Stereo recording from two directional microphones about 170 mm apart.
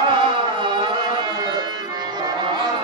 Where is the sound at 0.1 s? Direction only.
30° right (ahead or behind).